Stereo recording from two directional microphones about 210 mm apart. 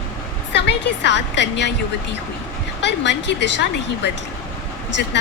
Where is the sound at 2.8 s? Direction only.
55° left (ahead or behind).